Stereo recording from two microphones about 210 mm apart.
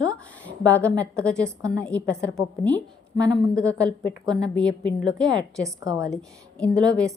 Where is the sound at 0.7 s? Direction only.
5° left (ahead or behind).